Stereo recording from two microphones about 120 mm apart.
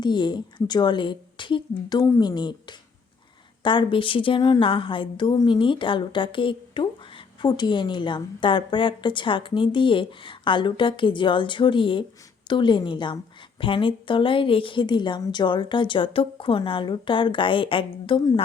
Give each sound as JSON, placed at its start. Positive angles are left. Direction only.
{"t": 0.0, "sound": "a woman's voice", "side_deg": 40}
{"t": 2.0, "sound": "a woman's voice", "side_deg": 30}